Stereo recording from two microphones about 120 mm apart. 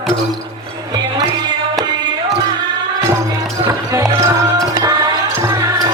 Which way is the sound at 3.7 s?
30° right (ahead or behind).